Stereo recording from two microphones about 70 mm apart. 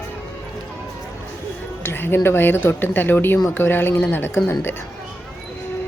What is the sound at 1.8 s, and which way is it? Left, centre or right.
A woman's voice, left.